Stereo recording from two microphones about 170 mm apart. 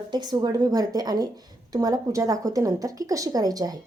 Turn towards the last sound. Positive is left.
turn(degrees=-20)  # may be behind; listen again after turning